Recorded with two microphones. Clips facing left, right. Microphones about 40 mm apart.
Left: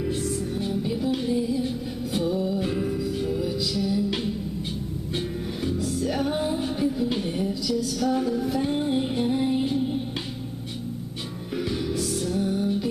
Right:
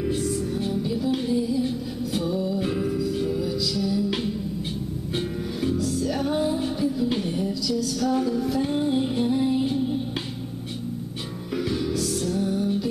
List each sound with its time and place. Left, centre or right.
0.0 s music: centre
0.8 s music: centre
2.6 s music: centre
3.4 s music: centre
4.1 s music: centre
5.8 s music: centre
7.1 s a sound: centre
7.3 s music: centre
11.5 s music: centre